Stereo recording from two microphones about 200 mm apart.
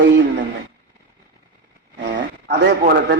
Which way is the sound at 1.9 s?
60° right (ahead or behind).